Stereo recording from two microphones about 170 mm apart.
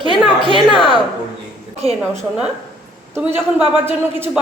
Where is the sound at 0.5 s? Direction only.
30° left (ahead or behind).